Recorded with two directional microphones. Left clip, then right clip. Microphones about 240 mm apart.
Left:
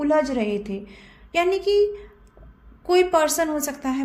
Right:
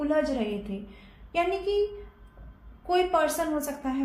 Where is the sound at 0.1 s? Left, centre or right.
Left.